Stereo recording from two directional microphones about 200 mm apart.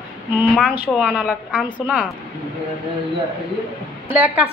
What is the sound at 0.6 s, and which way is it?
A woman's voice, centre (ahead or behind).